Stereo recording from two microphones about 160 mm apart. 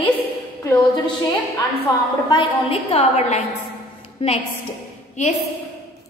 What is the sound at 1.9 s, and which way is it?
Speech, 25° left (ahead or behind).